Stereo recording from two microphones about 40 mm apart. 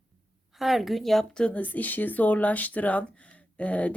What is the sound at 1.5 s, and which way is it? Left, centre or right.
Speech, left.